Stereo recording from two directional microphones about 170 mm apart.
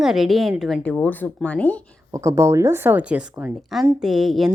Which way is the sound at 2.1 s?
20° right (ahead or behind).